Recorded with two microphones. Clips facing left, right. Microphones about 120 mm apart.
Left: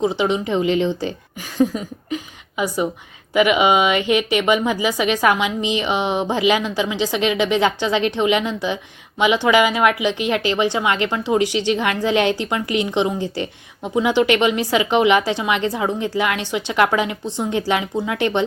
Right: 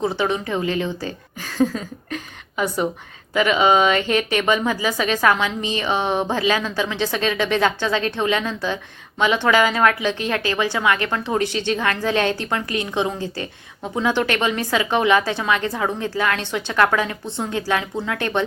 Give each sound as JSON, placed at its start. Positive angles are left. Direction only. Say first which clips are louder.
{"t": 0.0, "sound": "a woman's voice", "louder": "left 3 dB", "side_deg": 15}